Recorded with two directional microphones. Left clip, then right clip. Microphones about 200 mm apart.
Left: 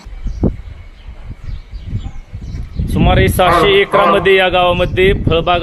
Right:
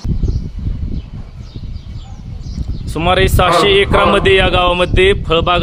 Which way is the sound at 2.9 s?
10° right (ahead or behind).